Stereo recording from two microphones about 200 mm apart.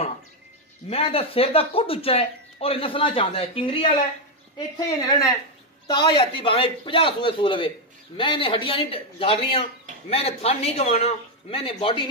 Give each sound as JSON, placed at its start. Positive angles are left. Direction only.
{"t": 0.8, "sound": "speech", "side_deg": 30}